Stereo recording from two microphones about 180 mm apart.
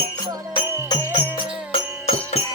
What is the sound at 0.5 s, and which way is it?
Music, 25° left (ahead or behind).